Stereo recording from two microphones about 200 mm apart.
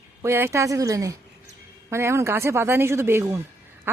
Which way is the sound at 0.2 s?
15° right (ahead or behind).